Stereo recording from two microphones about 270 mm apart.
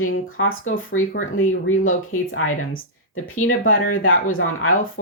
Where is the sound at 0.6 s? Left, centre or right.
Left.